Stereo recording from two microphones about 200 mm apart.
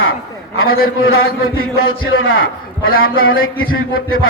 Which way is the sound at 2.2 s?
90° left.